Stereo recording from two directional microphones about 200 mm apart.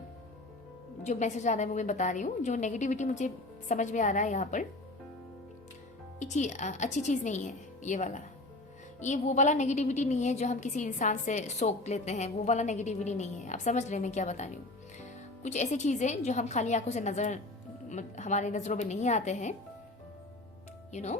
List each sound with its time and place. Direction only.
1.0 s a woman's voice: 35° left (ahead or behind)
6.1 s a woman's voice: 35° left (ahead or behind)
20.9 s a woman's voice: 35° left (ahead or behind)